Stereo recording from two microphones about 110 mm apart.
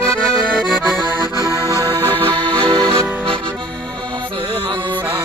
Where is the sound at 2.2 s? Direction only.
50° right (ahead or behind).